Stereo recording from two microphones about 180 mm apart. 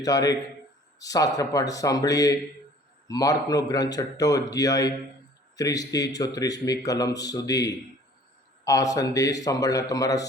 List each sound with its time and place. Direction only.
0.0 s speech: 20° left (ahead or behind)